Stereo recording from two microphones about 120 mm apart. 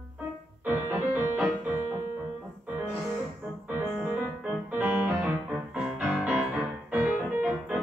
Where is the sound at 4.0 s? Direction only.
10° right (ahead or behind).